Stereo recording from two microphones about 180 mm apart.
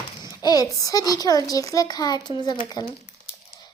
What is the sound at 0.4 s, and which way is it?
A child's voice, 20° left (ahead or behind).